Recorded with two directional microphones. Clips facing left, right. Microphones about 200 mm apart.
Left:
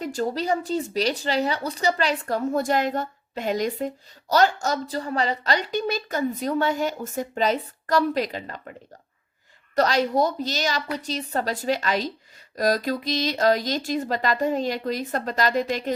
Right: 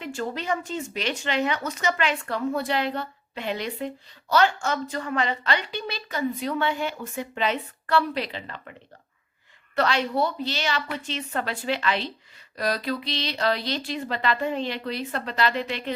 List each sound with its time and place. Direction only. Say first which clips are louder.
0.0 s a woman's voice: left 5 dB; 40° left (ahead or behind)
9.7 s a woman's voice: left 3 dB; 40° left (ahead or behind)